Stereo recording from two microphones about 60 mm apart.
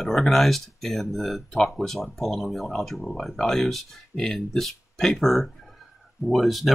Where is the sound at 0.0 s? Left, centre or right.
Centre.